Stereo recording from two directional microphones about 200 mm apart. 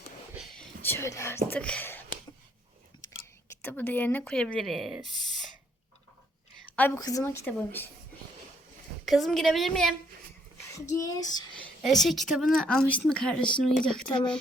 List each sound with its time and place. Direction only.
0.3 s whispering: 5° left (ahead or behind)
3.6 s speech: 10° left (ahead or behind)
6.7 s a woman's voice: 10° left (ahead or behind)
9.0 s speech: centre (ahead or behind)
10.9 s a woman's voice: 15° left (ahead or behind)
11.6 s a woman's voice: centre (ahead or behind)